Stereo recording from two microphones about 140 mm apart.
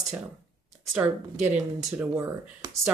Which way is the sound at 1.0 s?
5° right (ahead or behind).